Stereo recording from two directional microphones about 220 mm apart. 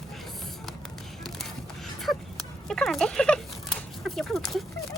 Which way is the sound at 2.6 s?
Centre (ahead or behind).